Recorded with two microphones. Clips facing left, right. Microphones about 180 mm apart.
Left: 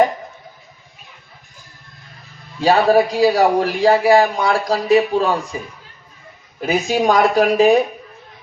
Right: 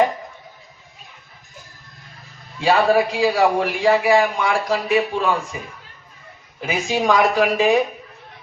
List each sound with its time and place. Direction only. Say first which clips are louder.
2.6 s a man's voice: left 3 dB; 40° left (ahead or behind)
6.6 s a man's voice: left 4 dB; 40° left (ahead or behind)